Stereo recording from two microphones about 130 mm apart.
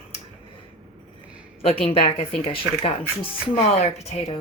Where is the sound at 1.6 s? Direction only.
50° left (ahead or behind).